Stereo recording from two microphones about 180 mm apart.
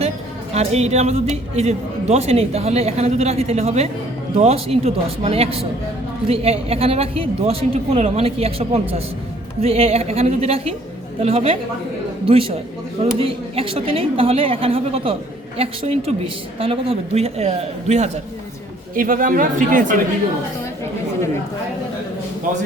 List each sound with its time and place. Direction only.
0.5 s speech: 35° right (ahead or behind)
18.9 s speech: 50° right (ahead or behind)